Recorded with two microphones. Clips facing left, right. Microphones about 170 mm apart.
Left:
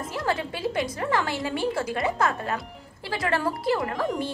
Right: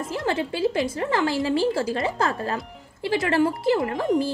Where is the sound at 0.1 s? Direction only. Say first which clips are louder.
Right 2 dB; 25° right (ahead or behind).